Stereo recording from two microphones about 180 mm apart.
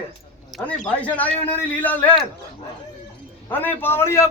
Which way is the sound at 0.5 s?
10° left (ahead or behind).